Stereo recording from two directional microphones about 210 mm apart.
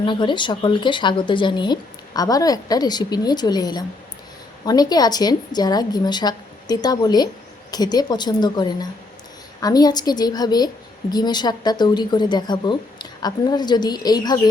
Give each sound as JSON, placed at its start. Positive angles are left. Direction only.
{"t": 0.0, "sound": "speech", "side_deg": 20}